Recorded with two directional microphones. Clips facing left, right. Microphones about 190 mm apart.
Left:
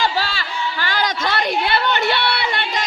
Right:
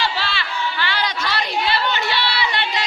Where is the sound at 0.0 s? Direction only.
45° left (ahead or behind).